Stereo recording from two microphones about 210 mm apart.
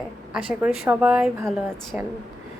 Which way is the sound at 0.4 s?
5° right (ahead or behind).